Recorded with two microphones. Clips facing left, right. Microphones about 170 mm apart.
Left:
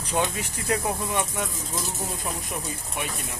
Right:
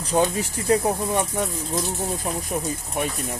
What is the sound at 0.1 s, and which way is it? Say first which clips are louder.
Speech: right 6 dB; 35° right (ahead or behind).